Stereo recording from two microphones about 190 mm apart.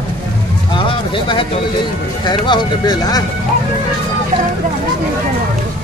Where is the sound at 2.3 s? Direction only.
20° left (ahead or behind).